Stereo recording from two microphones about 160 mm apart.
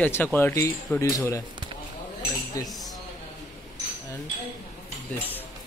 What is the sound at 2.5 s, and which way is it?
Speech, 20° left (ahead or behind).